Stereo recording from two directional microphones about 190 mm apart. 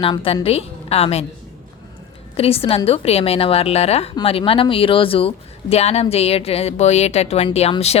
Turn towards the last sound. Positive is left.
turn(degrees=30)  # may be behind; listen again after turning